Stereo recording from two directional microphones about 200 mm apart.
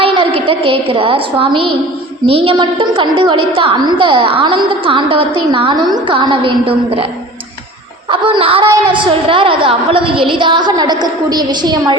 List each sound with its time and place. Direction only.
0.0 s a woman's voice: 25° right (ahead or behind)
8.1 s a woman's voice: 25° right (ahead or behind)